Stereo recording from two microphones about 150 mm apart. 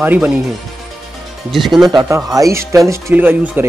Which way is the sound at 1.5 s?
Centre (ahead or behind).